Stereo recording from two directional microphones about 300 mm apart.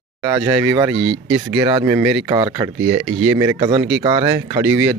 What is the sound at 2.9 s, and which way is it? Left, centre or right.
Speech, right.